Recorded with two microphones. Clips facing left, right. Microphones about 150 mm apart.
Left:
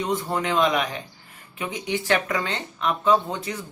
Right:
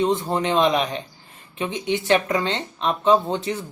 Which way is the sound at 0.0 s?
25° right (ahead or behind).